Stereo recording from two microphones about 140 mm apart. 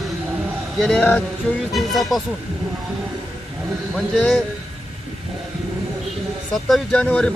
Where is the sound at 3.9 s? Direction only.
5° left (ahead or behind).